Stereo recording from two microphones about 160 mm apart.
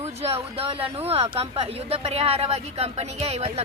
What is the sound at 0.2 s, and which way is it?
Speech, 40° right (ahead or behind).